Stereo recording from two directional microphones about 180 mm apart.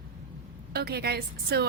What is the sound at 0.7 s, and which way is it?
Speech, 60° right (ahead or behind).